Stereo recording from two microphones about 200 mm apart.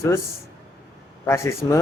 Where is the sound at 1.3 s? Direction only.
15° left (ahead or behind).